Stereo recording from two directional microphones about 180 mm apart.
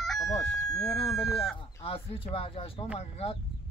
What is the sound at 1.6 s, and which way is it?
Speech, 30° left (ahead or behind).